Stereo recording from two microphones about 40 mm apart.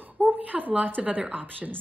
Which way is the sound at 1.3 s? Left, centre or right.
Right.